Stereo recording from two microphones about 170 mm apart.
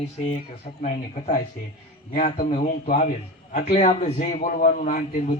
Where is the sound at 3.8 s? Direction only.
45° left (ahead or behind).